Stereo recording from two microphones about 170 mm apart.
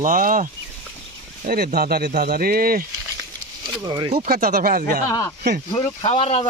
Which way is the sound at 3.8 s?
25° right (ahead or behind).